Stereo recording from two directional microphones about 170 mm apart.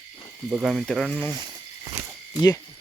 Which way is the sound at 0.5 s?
Centre (ahead or behind).